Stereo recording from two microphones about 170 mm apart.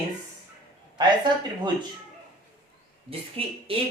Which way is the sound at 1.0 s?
25° right (ahead or behind).